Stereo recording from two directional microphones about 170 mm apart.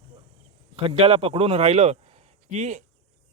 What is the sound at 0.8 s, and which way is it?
A man's voice, 35° right (ahead or behind).